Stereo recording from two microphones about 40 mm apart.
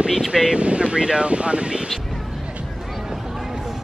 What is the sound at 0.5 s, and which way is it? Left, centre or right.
Speech, right.